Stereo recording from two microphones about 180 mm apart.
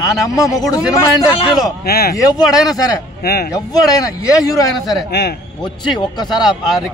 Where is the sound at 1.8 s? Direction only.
60° left (ahead or behind).